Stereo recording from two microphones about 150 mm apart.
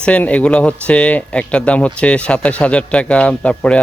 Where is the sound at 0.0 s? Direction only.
10° left (ahead or behind).